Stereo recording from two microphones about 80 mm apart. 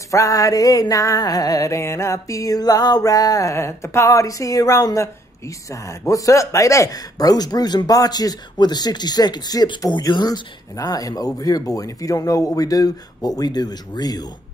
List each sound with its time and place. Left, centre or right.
0.1 s music: left
13.4 s speech: left